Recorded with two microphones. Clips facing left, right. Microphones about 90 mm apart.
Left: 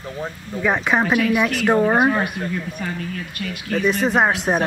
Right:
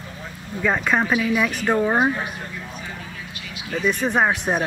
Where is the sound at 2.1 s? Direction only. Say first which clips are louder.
Left 5 dB; 60° left (ahead or behind).